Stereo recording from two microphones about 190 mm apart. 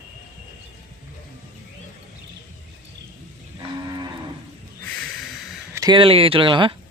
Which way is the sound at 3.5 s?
20° right (ahead or behind).